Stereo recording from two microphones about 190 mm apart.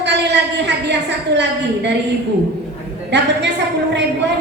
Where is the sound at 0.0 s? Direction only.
65° right (ahead or behind).